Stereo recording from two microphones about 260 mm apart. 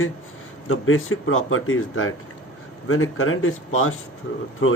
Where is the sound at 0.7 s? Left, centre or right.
Left.